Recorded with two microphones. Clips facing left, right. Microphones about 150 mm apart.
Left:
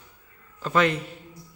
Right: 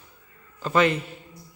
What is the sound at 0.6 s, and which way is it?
Speech, centre (ahead or behind).